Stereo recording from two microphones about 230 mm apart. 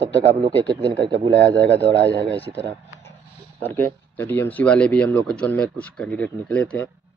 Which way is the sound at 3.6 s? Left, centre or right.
Centre.